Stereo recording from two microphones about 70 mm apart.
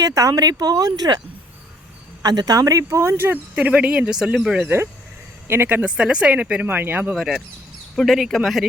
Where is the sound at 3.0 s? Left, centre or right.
Right; by 4.3 s centre.